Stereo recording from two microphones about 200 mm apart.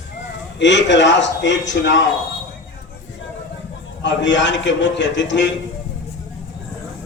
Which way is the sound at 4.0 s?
65° left (ahead or behind).